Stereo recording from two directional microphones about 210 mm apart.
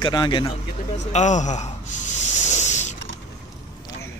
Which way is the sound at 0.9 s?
35° left (ahead or behind).